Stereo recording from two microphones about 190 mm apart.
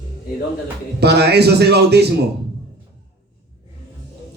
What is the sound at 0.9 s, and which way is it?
A man's voice, 60° right (ahead or behind).